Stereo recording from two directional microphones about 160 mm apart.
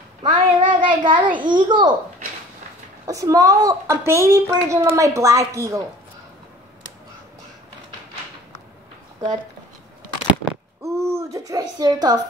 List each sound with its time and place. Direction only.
0.2 s a child's voice: 30° right (ahead or behind)
3.1 s a woman's voice: 20° right (ahead or behind)
10.8 s speech: 15° right (ahead or behind)